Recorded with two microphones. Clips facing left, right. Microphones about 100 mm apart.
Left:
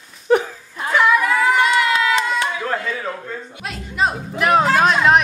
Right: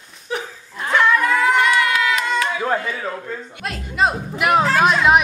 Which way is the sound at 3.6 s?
Centre (ahead or behind).